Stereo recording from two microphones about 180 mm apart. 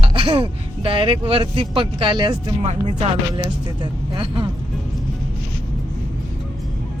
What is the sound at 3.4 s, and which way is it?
Speech, 25° right (ahead or behind).